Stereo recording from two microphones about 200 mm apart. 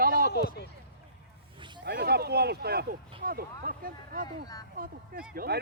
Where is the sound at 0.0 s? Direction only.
45° right (ahead or behind).